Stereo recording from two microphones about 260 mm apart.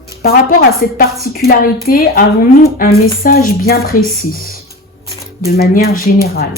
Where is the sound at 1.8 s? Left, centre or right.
Left.